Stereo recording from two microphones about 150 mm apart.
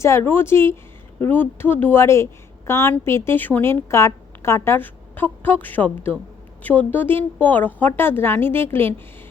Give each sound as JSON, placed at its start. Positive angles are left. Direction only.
{"t": 0.0, "sound": "speech", "side_deg": 15}